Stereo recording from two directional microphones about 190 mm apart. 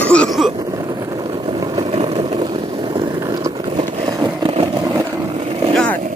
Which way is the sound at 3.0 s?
20° right (ahead or behind).